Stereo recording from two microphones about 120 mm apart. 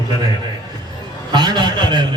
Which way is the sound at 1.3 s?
40° right (ahead or behind).